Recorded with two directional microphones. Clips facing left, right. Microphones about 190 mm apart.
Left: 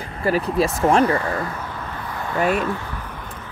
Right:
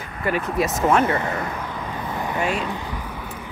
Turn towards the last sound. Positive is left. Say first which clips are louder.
# right 2 dB
turn(degrees=-10)  # may be behind; listen again after turning